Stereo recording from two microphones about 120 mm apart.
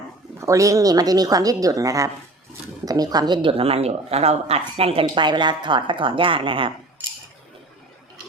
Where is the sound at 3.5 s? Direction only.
55° right (ahead or behind).